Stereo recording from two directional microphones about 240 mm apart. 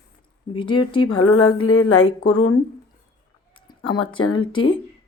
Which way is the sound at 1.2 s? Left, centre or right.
Left.